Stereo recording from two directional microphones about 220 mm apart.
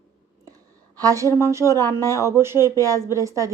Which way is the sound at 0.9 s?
15° right (ahead or behind).